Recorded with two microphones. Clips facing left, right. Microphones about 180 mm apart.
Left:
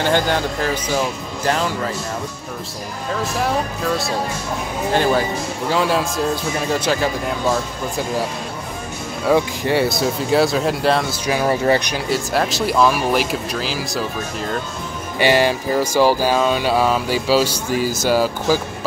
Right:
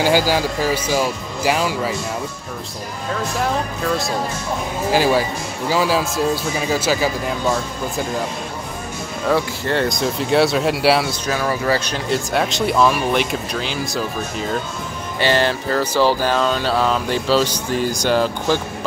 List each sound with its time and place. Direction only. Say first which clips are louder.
0.0 s speech: right 2 dB; 5° right (ahead or behind)
3.1 s speech: left 1 dB; centre (ahead or behind)
9.3 s speech: left 3 dB; 10° left (ahead or behind)
11.1 s music: left 2 dB; 15° left (ahead or behind)
11.4 s speech: left 4 dB; 25° left (ahead or behind)
11.9 s speech: even; 5° left (ahead or behind)
15.1 s music: left 2 dB; 10° left (ahead or behind)